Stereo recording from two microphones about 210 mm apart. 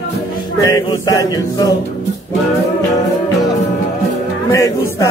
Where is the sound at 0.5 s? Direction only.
15° left (ahead or behind).